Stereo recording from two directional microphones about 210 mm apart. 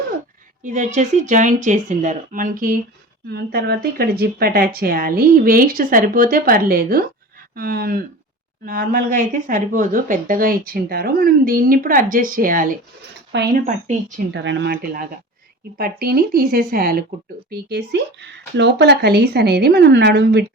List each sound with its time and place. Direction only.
0.6 s speech: 35° right (ahead or behind); by 20.4 s 50° right (ahead or behind)